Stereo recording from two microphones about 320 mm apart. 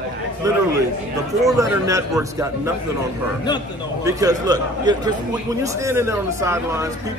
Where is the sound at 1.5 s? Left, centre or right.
Centre.